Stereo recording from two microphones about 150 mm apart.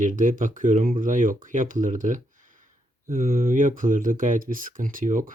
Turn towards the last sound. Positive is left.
turn(degrees=-65)  # may be behind; listen again after turning